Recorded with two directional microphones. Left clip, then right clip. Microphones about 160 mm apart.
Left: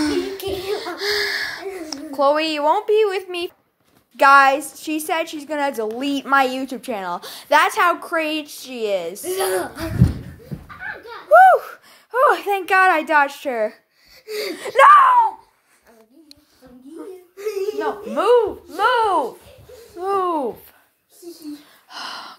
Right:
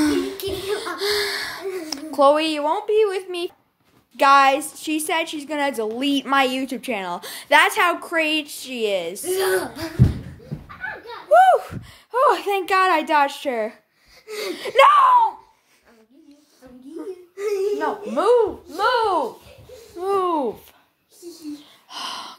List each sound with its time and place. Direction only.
0.0 s a sound: 15° right (ahead or behind)
1.9 s a sound: 30° right (ahead or behind)
2.3 s a woman's voice: 5° right (ahead or behind)
2.6 s speech: 25° left (ahead or behind)
3.0 s speech: 10° left (ahead or behind)
4.2 s a woman's voice: 5° right (ahead or behind)
11.2 s a woman's voice: 5° right (ahead or behind)
14.5 s a woman's voice: 15° right (ahead or behind)
17.4 s speech: 15° left (ahead or behind)
18.1 s a woman's voice: centre (ahead or behind)
21.8 s gasp: 10° right (ahead or behind)